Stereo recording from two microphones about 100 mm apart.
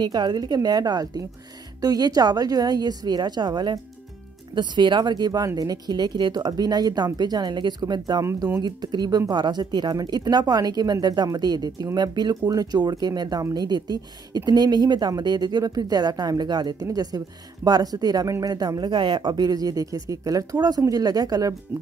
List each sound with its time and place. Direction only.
0.0 s speech: 45° right (ahead or behind)